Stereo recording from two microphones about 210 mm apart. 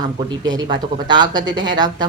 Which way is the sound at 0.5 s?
20° right (ahead or behind).